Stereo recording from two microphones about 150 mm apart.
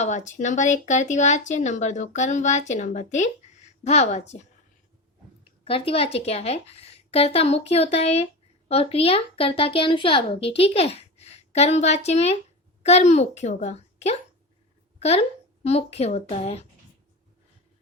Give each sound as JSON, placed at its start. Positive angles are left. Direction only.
{"t": 0.0, "sound": "speech", "side_deg": 50}
{"t": 5.6, "sound": "a woman's voice", "side_deg": 40}
{"t": 14.9, "sound": "a sound", "side_deg": 45}
{"t": 15.6, "sound": "speech", "side_deg": 45}